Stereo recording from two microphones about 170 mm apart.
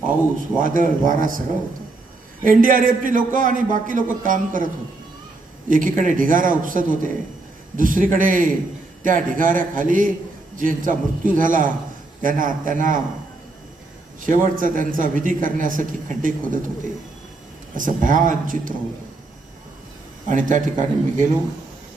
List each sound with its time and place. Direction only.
0.1 s a man's voice: 50° right (ahead or behind)
2.4 s a man's voice: 55° right (ahead or behind)
14.2 s a man's voice: 50° right (ahead or behind)
17.7 s a man's voice: 50° right (ahead or behind)
20.2 s a man's voice: 50° right (ahead or behind)